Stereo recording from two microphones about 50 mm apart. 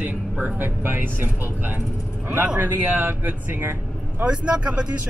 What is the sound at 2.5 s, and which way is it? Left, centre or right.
Speech, right.